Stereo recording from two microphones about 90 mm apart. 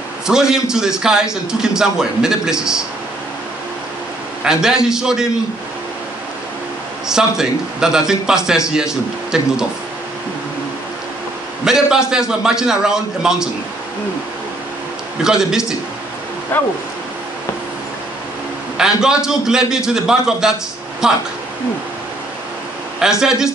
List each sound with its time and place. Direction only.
0.3 s a man's voice: 5° right (ahead or behind)
4.5 s a man's voice: 5° right (ahead or behind)
7.1 s a man's voice: 5° right (ahead or behind)
11.6 s a man's voice: 5° right (ahead or behind)
15.2 s a man's voice: 5° right (ahead or behind)
16.5 s speech: 20° left (ahead or behind)
18.8 s a man's voice: 5° right (ahead or behind)
23.0 s speech: 10° right (ahead or behind)